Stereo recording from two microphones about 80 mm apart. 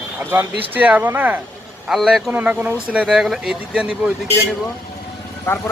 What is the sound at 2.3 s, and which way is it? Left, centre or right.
Speech, centre.